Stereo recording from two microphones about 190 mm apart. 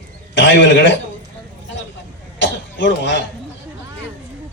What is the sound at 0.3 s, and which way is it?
Speech, 75° left (ahead or behind).